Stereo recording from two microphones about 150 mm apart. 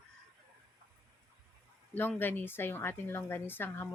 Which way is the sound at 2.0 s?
15° left (ahead or behind).